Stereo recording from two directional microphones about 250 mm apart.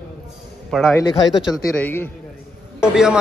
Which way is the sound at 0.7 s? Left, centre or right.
Centre.